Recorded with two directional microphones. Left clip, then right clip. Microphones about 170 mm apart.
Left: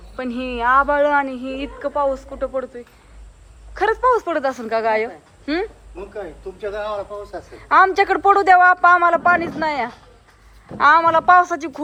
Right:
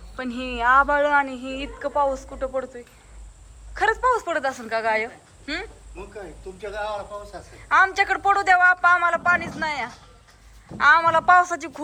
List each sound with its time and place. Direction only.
0.2 s a woman's voice: 5° left (ahead or behind)
6.6 s speech: 60° left (ahead or behind)
7.7 s a man's voice: 20° left (ahead or behind)